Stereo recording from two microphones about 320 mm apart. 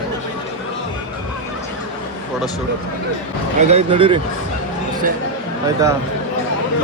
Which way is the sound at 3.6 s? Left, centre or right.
Centre.